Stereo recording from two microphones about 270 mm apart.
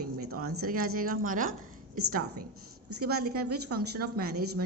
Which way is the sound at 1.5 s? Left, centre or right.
Right.